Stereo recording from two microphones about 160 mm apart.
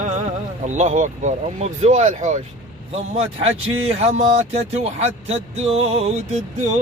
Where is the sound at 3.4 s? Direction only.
40° right (ahead or behind).